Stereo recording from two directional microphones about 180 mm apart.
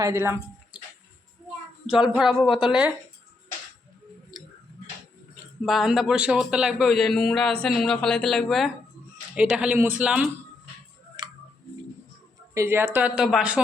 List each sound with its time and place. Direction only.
0.0 s speech: 15° right (ahead or behind)
1.9 s a man's voice: centre (ahead or behind)
5.6 s a man's voice: centre (ahead or behind)
11.2 s tick-tock: 25° right (ahead or behind)
12.5 s speech: 15° right (ahead or behind)